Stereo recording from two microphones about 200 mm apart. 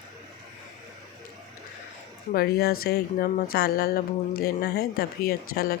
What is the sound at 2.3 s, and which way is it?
A woman's voice, 50° left (ahead or behind).